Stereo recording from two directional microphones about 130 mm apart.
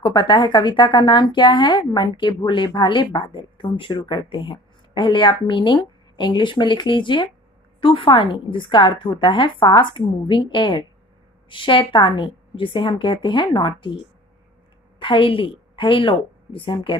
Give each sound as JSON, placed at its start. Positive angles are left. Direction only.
{"t": 0.0, "sound": "a woman's voice", "side_deg": 35}